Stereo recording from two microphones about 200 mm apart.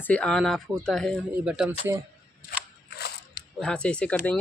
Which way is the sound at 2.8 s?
55° left (ahead or behind).